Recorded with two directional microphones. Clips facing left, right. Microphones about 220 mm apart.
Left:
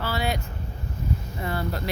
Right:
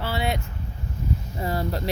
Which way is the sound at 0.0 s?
25° right (ahead or behind).